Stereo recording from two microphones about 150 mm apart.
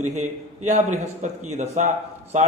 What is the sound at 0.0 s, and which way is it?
A man's voice, 50° right (ahead or behind).